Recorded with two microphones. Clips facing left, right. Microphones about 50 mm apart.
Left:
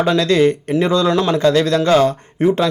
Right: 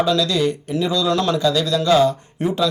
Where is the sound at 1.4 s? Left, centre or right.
Left.